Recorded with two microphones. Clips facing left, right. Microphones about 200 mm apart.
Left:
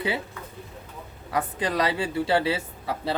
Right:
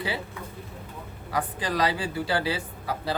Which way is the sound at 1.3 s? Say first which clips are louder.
Left 2 dB; 25° left (ahead or behind).